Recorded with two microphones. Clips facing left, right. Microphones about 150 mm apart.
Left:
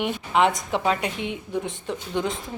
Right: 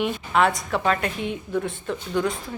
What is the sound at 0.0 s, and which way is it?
A woman's voice, 20° left (ahead or behind).